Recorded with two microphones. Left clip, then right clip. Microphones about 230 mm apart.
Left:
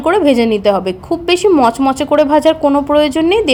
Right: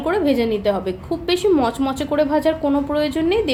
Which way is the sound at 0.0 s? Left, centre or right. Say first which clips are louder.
Left 8 dB; left.